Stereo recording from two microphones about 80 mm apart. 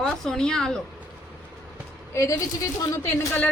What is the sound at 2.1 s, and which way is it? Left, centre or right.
Speech, left.